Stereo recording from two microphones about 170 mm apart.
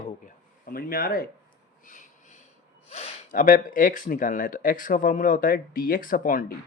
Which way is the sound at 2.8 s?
40° left (ahead or behind).